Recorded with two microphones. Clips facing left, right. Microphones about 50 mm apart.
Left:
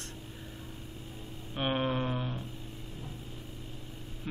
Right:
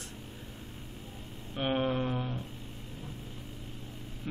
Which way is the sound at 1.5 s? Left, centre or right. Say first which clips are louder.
Right 1 dB; centre.